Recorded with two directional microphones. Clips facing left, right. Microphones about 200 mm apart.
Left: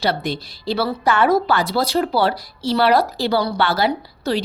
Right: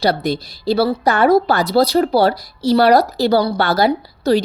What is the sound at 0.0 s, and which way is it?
A woman's voice, 40° right (ahead or behind).